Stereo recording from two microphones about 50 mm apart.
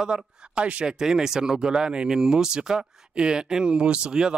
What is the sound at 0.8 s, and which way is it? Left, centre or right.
Speech, centre.